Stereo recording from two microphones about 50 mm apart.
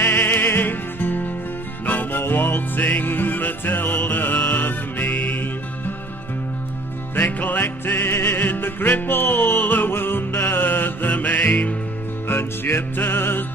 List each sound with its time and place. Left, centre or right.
0.0 s music: left
7.2 s music: left
12.3 s music: left